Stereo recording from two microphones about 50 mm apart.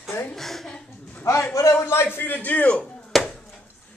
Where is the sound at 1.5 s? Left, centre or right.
Left.